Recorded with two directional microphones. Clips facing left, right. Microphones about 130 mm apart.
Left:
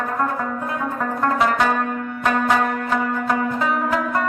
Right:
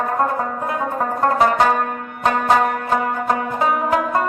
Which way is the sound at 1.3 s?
35° right (ahead or behind).